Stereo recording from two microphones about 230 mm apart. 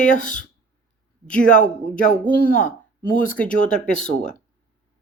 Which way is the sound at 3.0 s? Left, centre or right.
Left.